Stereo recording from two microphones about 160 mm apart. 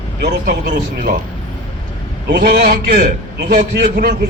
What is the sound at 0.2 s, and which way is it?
A man's voice, 90° right.